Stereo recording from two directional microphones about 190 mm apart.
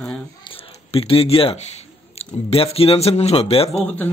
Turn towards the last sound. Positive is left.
turn(degrees=10)  # may be behind; listen again after turning